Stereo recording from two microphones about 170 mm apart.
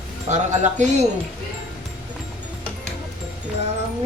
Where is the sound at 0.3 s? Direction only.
45° right (ahead or behind).